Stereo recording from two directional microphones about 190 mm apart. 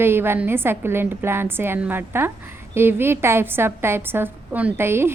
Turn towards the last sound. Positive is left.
turn(degrees=-10)  # may be behind; listen again after turning